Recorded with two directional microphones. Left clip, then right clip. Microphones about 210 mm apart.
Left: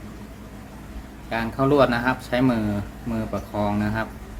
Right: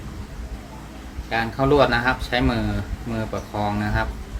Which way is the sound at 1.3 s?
15° left (ahead or behind).